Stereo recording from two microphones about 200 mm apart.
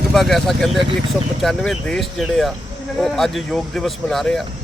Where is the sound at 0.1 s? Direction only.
Centre (ahead or behind).